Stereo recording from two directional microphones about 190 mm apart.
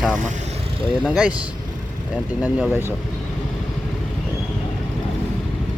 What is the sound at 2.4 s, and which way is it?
Speech, 10° right (ahead or behind).